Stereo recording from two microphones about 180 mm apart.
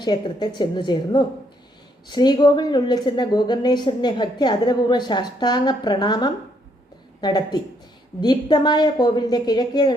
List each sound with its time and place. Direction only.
0.0 s speech: 25° left (ahead or behind)